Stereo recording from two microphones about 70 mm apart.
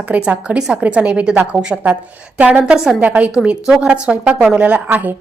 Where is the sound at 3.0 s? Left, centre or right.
Right.